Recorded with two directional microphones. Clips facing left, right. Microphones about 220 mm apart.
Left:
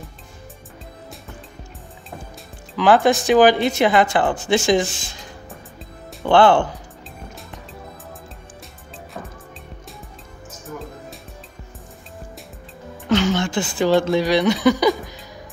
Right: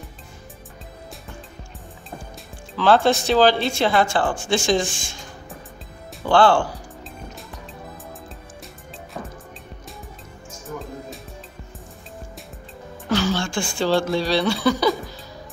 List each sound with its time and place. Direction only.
2.7 s speech: 15° left (ahead or behind)
6.2 s speech: 20° left (ahead or behind)
13.1 s speech: 20° left (ahead or behind)